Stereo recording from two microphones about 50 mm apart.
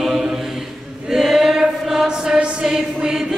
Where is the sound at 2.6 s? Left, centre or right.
Centre.